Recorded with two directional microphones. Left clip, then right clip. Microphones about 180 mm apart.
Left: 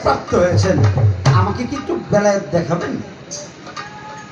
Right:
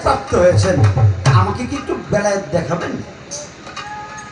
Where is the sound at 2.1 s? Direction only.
35° left (ahead or behind).